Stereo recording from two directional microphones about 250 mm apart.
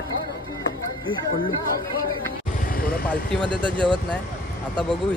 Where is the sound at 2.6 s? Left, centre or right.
Left.